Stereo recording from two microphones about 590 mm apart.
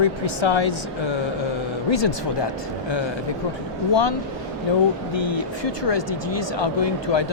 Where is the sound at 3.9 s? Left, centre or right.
Left.